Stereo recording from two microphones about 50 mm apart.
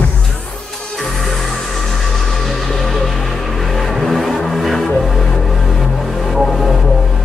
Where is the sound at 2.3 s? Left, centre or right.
Centre.